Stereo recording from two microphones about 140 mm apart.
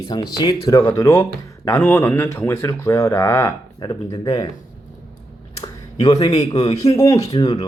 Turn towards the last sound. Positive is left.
turn(degrees=25)  # may be behind; listen again after turning